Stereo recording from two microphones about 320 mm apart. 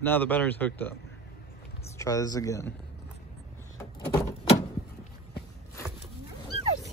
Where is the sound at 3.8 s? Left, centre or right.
Centre.